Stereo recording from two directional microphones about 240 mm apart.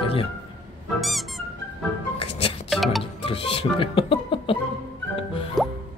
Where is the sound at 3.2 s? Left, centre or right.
Left.